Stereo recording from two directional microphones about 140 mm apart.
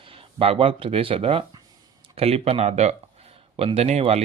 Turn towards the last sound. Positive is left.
turn(degrees=-50)  # may be behind; listen again after turning